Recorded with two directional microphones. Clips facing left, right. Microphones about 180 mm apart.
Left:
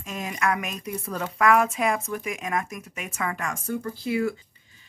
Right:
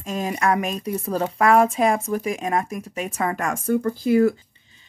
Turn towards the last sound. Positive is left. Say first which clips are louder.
# right 8 dB
turn(degrees=-45)  # may be behind; listen again after turning